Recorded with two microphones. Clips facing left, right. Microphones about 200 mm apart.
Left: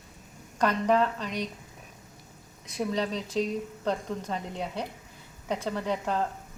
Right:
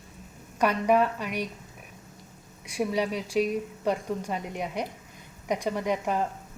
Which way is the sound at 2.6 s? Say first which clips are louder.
Right 2 dB; 10° right (ahead or behind).